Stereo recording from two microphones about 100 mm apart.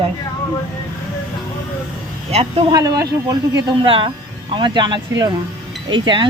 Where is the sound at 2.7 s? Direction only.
35° right (ahead or behind).